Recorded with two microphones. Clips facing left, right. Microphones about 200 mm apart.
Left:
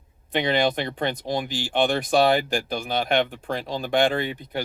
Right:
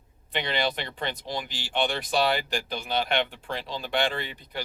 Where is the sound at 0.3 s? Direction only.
50° left (ahead or behind).